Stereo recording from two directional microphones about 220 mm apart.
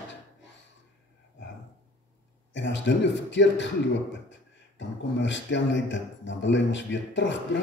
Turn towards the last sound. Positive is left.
turn(degrees=55)  # may be behind; listen again after turning